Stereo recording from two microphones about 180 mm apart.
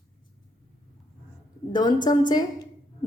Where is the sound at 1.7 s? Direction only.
25° left (ahead or behind).